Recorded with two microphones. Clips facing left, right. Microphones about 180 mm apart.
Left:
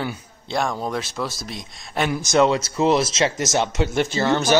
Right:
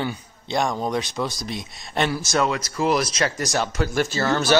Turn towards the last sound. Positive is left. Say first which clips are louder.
# left 2 dB
turn(degrees=20)  # may be behind; listen again after turning